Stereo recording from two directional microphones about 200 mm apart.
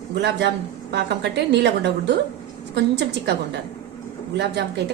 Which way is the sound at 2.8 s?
60° right (ahead or behind).